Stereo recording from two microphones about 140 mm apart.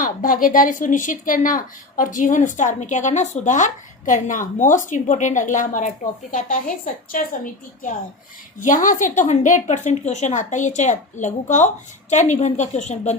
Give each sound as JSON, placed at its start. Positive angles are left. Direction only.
{"t": 0.0, "sound": "a woman's voice", "side_deg": 75}
{"t": 7.1, "sound": "a woman's voice", "side_deg": 75}